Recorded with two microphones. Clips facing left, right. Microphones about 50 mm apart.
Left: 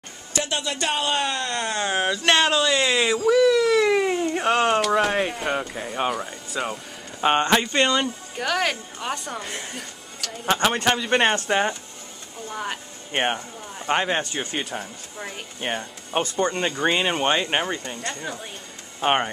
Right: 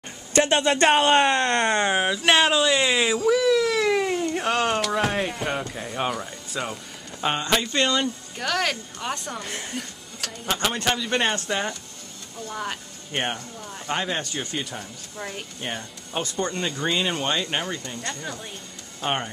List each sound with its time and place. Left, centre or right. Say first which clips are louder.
0.3 s speech: right 7 dB; right
1.9 s speech: even; centre
3.3 s cat: left 4 dB; centre
7.2 s speech: left 4 dB; centre
10.4 s speech: left 5 dB; left
10.9 s speech: left 3 dB; centre
12.4 s speech: left 1 dB; centre
13.1 s speech: left 4 dB; left
14.4 s speech: left 2 dB; centre
15.7 s speech: left 6 dB; centre
17.8 s speech: left 2 dB; centre
18.9 s speech: left 5 dB; left